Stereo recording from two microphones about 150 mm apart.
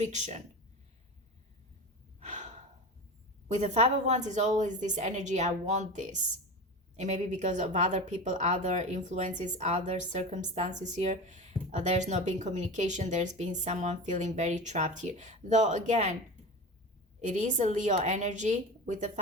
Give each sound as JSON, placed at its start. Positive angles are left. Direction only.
{"t": 0.0, "sound": "speech", "side_deg": -50}
{"t": 2.2, "sound": "gasp", "side_deg": -50}
{"t": 3.5, "sound": "speech", "side_deg": -50}
{"t": 17.2, "sound": "speech", "side_deg": -55}